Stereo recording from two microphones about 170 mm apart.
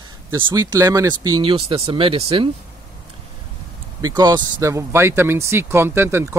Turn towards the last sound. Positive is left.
turn(degrees=-15)  # may be behind; listen again after turning